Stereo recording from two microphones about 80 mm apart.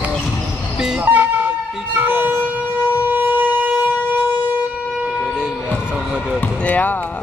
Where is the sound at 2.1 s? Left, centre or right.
Right.